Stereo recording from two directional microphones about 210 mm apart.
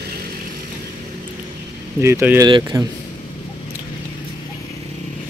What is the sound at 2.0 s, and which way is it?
Speech, 10° right (ahead or behind).